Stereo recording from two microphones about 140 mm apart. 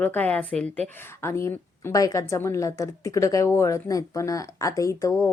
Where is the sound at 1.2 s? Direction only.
20° left (ahead or behind).